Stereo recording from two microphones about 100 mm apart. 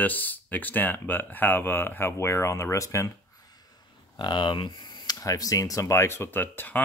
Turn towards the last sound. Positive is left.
turn(degrees=20)  # may be behind; listen again after turning